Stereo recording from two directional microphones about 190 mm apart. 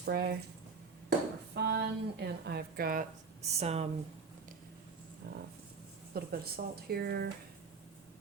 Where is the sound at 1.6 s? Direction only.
60° right (ahead or behind).